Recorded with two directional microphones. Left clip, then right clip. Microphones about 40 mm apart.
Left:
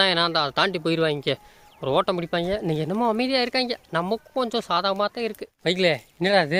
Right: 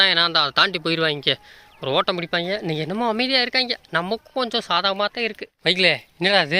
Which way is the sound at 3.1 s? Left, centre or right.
Left.